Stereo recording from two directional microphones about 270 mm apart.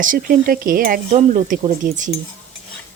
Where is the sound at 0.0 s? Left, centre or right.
Right.